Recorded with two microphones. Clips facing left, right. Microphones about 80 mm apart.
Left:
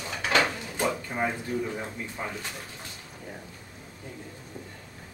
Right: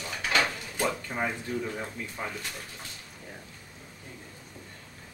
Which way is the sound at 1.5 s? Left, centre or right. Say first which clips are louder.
Left 2 dB; left.